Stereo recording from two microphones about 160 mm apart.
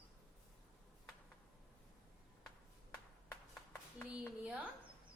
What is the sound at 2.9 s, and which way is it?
Clapping, 15° left (ahead or behind).